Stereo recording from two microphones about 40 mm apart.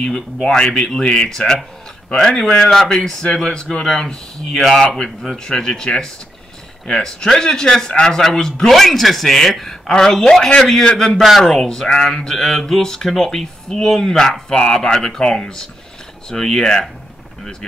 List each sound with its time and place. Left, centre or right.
0.7 s speech: centre
4.8 s speech: left; by 11.4 s centre
11.4 s speech: centre